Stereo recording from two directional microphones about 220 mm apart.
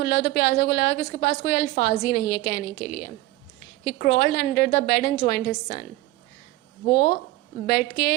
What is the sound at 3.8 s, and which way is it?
A woman's voice, 50° left (ahead or behind).